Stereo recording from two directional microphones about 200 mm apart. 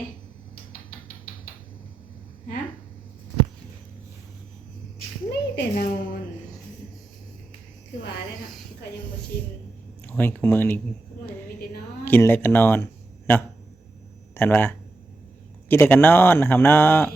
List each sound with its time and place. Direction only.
5.3 s a sound: 50° left (ahead or behind)
9.3 s a woman's voice: 45° left (ahead or behind)
10.1 s a man's voice: 10° left (ahead or behind)
12.0 s a man's voice: 10° left (ahead or behind)